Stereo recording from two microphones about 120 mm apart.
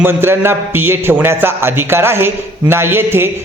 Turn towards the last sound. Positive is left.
turn(degrees=-20)  # may be behind; listen again after turning